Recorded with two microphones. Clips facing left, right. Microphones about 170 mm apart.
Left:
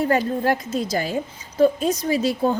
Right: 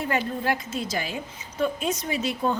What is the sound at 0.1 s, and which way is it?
A woman's voice, 40° left (ahead or behind).